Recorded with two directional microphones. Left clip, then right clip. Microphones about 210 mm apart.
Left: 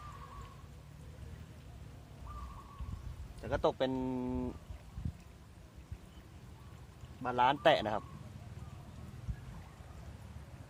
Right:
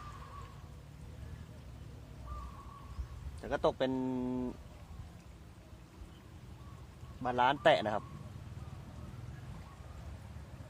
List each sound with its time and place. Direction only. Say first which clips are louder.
3.5 s speech: even; 20° left (ahead or behind)
7.2 s speech: even; 20° left (ahead or behind)